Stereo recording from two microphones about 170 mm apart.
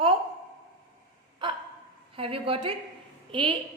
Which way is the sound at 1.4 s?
30° right (ahead or behind).